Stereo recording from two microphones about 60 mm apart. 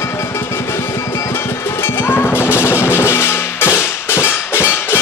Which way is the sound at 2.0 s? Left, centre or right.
Left.